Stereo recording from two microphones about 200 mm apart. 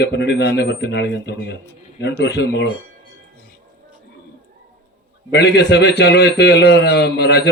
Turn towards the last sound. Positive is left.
turn(degrees=55)  # may be behind; listen again after turning